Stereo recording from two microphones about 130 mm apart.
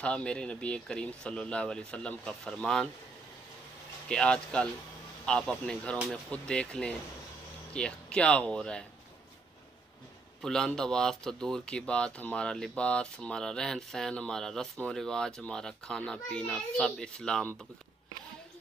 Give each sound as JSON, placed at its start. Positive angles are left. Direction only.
{"t": 0.0, "sound": "speech", "side_deg": 10}
{"t": 4.1, "sound": "speech", "side_deg": 5}
{"t": 10.4, "sound": "speech", "side_deg": 5}